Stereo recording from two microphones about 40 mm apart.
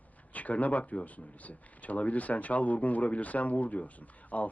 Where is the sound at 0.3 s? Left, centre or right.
Left.